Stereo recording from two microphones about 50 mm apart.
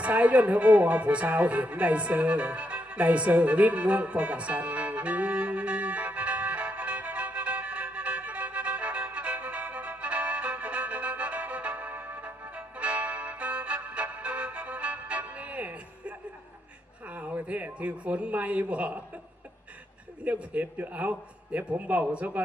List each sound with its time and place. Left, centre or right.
0.0 s music: right
17.1 s a sound: right
20.2 s a man's voice: right